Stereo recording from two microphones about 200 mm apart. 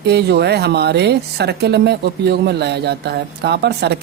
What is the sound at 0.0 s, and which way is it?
Speech, 55° right (ahead or behind).